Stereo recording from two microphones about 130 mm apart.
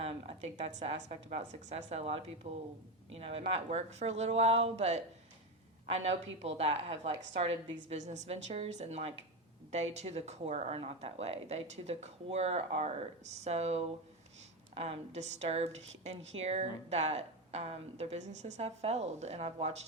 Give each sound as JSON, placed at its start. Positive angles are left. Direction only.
{"t": 0.5, "sound": "a woman's voice", "side_deg": -60}
{"t": 6.4, "sound": "a woman's voice", "side_deg": -50}